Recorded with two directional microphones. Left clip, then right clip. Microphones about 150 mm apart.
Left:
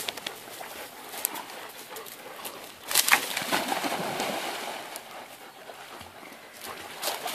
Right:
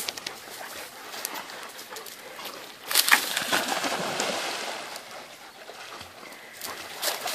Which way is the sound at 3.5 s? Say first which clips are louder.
Right 1 dB; centre (ahead or behind).